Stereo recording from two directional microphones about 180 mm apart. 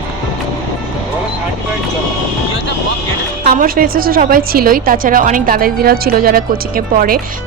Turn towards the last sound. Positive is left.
turn(degrees=-55)  # may be behind; listen again after turning